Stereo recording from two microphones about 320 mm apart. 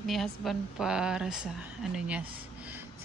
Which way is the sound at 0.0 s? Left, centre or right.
Centre.